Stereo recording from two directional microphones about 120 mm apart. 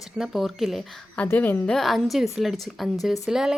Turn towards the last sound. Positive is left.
turn(degrees=-5)  # may be behind; listen again after turning